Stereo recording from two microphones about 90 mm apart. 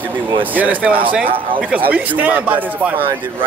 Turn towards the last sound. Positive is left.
turn(degrees=-20)  # may be behind; listen again after turning